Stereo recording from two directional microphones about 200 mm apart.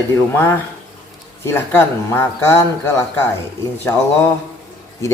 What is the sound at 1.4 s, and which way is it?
Speech, 10° left (ahead or behind).